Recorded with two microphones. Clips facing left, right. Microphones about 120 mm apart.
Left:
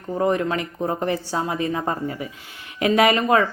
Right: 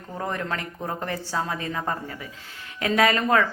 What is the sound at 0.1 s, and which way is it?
A woman's voice, 15° left (ahead or behind).